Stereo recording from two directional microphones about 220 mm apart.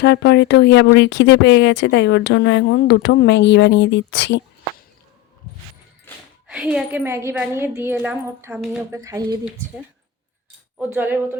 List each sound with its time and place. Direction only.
0.0 s speech: 50° left (ahead or behind)
6.1 s a sound: 10° left (ahead or behind)
6.5 s a woman's voice: 5° right (ahead or behind)
10.8 s a woman's voice: 10° right (ahead or behind)